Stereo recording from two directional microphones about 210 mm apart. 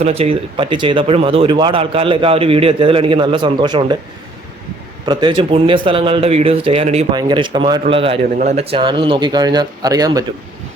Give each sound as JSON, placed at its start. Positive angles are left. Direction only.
{"t": 0.0, "sound": "speech", "side_deg": -30}
{"t": 5.0, "sound": "speech", "side_deg": -20}
{"t": 8.2, "sound": "speech", "side_deg": -35}